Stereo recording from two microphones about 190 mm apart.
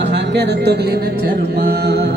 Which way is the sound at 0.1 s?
60° right (ahead or behind).